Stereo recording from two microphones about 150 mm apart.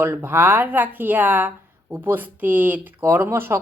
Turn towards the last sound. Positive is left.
turn(degrees=-15)  # may be behind; listen again after turning